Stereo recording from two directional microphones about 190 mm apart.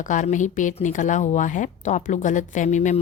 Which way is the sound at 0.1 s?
40° left (ahead or behind).